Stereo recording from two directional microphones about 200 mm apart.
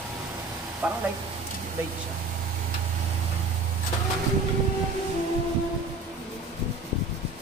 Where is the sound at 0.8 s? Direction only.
5° right (ahead or behind).